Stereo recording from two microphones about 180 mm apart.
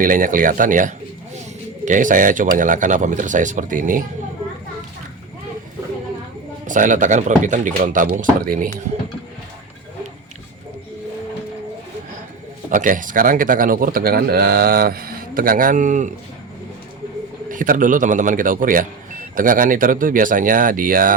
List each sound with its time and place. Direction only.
0.0 s speech: 50° right (ahead or behind)
6.7 s speech: 45° right (ahead or behind)
12.7 s speech: 45° right (ahead or behind)
17.5 s speech: 45° right (ahead or behind)